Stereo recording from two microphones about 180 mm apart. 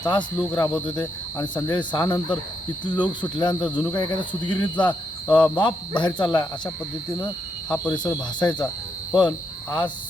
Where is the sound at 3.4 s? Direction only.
25° left (ahead or behind).